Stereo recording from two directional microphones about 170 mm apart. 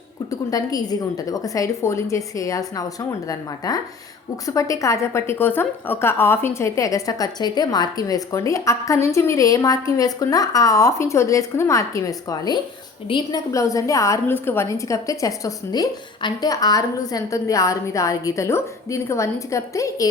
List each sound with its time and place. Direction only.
0.3 s a woman's voice: 20° left (ahead or behind)